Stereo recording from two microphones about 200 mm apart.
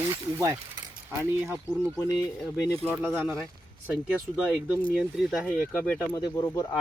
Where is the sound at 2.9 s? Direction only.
10° right (ahead or behind).